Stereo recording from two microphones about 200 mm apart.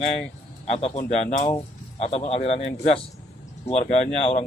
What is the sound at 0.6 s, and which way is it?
Speech, 35° left (ahead or behind).